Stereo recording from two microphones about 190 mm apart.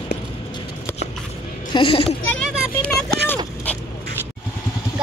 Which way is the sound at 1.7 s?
25° left (ahead or behind).